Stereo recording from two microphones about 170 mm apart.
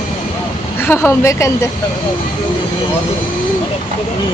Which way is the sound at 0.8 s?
15° left (ahead or behind).